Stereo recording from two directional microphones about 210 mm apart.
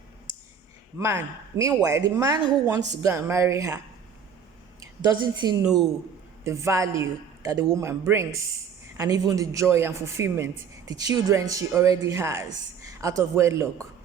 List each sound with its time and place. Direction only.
0.9 s a man's voice: 15° right (ahead or behind)
4.8 s a woman's voice: 20° right (ahead or behind)